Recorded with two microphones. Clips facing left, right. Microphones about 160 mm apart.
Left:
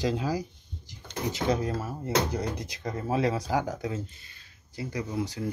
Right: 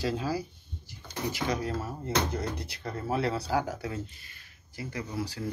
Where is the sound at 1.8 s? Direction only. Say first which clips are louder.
Left 2 dB; 15° left (ahead or behind).